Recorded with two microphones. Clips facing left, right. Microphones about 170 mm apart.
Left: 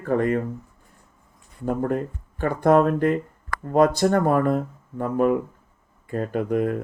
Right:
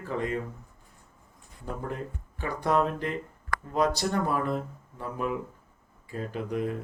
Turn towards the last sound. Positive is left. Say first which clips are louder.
# left 8 dB
turn(degrees=55)  # may be behind; listen again after turning